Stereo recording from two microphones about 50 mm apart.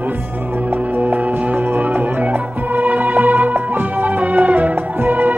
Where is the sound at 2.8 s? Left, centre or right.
Right.